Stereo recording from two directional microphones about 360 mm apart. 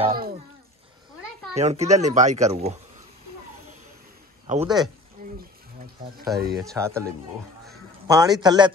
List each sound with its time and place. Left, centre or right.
0.0 s speech: right
1.5 s a child's voice: centre
4.5 s a man's voice: centre
5.2 s a sound: right
6.5 s speech: centre
8.1 s a man's voice: centre